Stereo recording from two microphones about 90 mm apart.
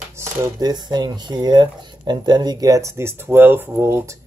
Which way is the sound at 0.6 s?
50° right (ahead or behind).